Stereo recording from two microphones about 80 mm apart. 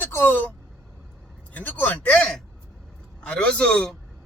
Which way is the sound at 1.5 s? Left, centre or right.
Left.